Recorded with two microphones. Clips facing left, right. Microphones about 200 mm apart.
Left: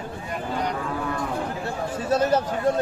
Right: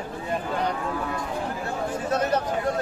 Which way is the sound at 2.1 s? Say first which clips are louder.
Left 4 dB; 30° left (ahead or behind).